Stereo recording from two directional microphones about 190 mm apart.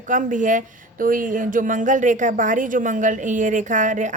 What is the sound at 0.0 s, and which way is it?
Speech, 40° right (ahead or behind).